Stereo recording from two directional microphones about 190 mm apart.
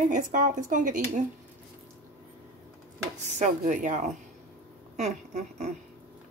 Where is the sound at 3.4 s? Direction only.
40° right (ahead or behind).